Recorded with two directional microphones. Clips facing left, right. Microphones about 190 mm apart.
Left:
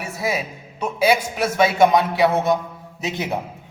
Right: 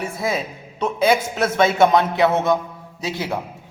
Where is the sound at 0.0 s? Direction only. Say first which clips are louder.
Right 1 dB; 10° left (ahead or behind).